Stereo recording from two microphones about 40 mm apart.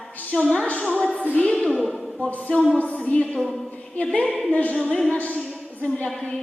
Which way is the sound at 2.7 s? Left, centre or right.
Left.